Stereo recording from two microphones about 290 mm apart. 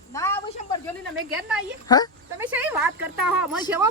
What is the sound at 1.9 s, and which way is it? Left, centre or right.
Speech, centre.